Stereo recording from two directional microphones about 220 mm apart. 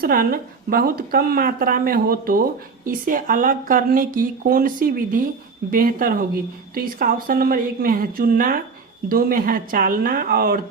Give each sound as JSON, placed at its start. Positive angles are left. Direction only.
{"t": 0.0, "sound": "speech", "side_deg": -40}